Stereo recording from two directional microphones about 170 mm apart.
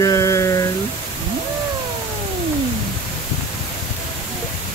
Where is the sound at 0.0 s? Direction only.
20° left (ahead or behind).